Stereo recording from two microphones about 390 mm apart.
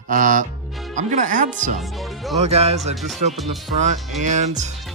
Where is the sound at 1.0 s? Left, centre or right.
Centre.